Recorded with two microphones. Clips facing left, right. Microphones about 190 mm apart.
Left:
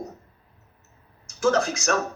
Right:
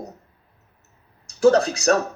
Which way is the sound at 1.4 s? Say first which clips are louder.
Right 6 dB; 35° right (ahead or behind).